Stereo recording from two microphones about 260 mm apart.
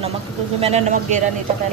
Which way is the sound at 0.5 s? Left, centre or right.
Right.